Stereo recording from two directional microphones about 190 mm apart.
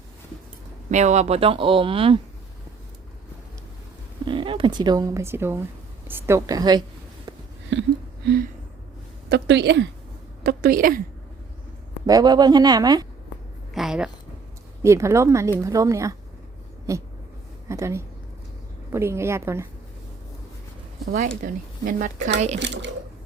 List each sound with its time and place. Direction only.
0.9 s speech: 40° right (ahead or behind)
4.3 s a woman's voice: 25° right (ahead or behind)
7.7 s a sound: 65° right (ahead or behind)
9.3 s speech: 65° right (ahead or behind)
10.4 s a woman's voice: 50° right (ahead or behind)
12.0 s speech: 20° right (ahead or behind)
13.7 s a sound: 5° right (ahead or behind)
14.8 s a woman's voice: 15° right (ahead or behind)
21.1 s speech: 45° right (ahead or behind)
22.5 s a child's voice: 70° right (ahead or behind)